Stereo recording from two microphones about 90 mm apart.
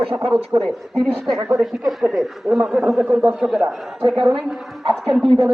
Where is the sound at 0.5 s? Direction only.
45° right (ahead or behind).